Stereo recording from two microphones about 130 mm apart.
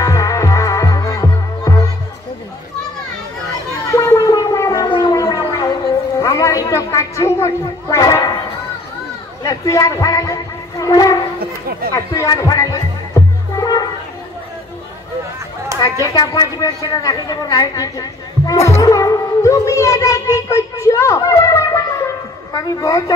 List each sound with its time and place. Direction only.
0.0 s music: 25° left (ahead or behind)
3.9 s gargling: 25° left (ahead or behind)
6.1 s a sound: 25° left (ahead or behind)
9.4 s music: 30° left (ahead or behind)
15.8 s speech: 30° left (ahead or behind)
18.8 s music: 25° left (ahead or behind)